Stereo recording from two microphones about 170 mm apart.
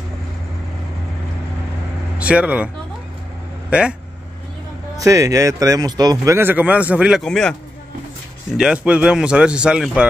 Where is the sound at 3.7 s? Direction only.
5° right (ahead or behind).